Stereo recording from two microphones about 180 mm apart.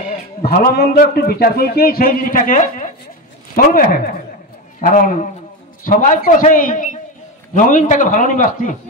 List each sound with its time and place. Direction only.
0.4 s a man's voice: 55° left (ahead or behind)